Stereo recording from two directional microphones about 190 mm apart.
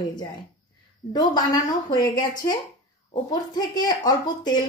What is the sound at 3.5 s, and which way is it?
A child's voice, 20° left (ahead or behind).